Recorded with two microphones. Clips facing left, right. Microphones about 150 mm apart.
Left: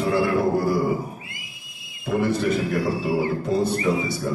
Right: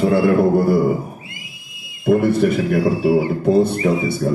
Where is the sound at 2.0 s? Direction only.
60° right (ahead or behind).